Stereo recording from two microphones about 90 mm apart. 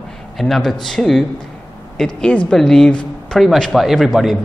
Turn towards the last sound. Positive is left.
turn(degrees=0)  # may be behind; listen again after turning